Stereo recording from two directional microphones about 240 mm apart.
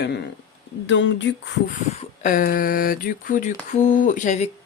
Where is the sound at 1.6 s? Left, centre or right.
Left.